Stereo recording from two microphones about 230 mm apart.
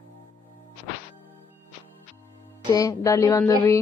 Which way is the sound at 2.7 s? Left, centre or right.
Centre.